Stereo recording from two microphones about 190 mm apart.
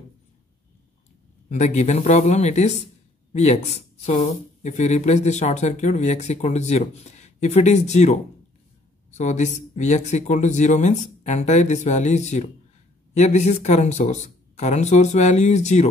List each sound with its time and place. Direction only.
1.5 s speech: 35° left (ahead or behind)